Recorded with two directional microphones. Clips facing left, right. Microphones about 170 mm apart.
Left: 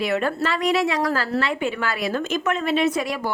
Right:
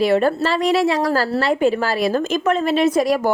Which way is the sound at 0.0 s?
35° right (ahead or behind).